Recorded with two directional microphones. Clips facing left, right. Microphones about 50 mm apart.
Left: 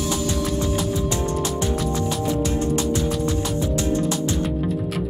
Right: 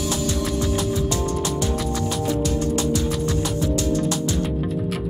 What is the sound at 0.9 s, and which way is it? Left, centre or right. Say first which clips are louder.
Music: even; left.